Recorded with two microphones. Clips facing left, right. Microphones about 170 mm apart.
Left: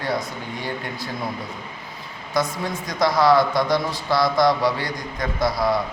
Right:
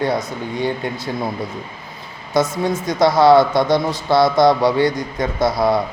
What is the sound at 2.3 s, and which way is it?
Speech, 25° right (ahead or behind).